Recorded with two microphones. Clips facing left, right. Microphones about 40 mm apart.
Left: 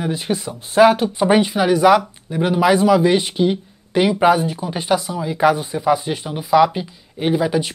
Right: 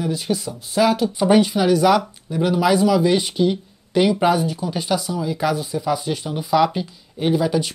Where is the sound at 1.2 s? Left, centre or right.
Centre.